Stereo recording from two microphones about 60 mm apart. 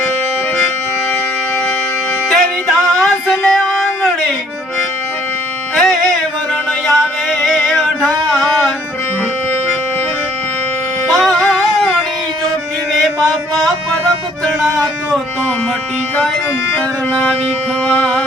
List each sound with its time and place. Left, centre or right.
2.3 s music: centre
5.7 s music: centre
11.1 s music: centre
12.9 s mantra: centre
16.7 s music: left